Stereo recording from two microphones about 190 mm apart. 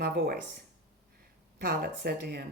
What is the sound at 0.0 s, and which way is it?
Speech, 55° right (ahead or behind).